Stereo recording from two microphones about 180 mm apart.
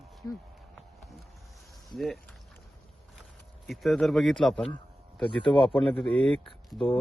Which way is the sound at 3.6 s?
Centre (ahead or behind).